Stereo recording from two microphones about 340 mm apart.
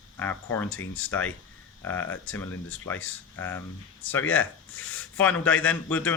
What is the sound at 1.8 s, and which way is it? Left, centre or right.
A man's voice, centre.